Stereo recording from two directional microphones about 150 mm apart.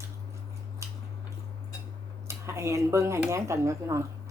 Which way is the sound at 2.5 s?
20° right (ahead or behind).